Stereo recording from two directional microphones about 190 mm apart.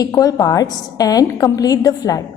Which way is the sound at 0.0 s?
20° left (ahead or behind).